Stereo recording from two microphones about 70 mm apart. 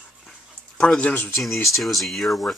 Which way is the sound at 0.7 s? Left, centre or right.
Centre.